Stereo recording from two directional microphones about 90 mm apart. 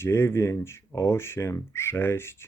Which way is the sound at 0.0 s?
25° left (ahead or behind).